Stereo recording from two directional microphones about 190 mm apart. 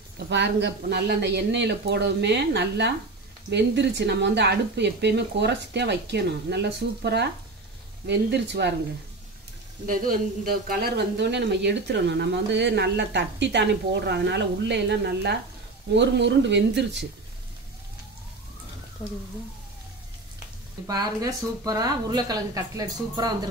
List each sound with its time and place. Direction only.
0.3 s speech: 65° right (ahead or behind)
9.8 s speech: 50° right (ahead or behind); by 17.0 s 65° right (ahead or behind)
20.8 s speech: 20° right (ahead or behind)